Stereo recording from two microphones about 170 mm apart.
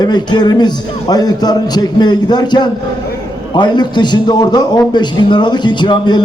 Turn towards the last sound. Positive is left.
turn(degrees=25)  # may be behind; listen again after turning